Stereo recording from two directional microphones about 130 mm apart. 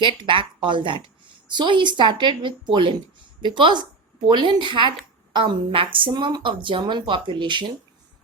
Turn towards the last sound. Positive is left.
turn(degrees=-35)  # may be behind; listen again after turning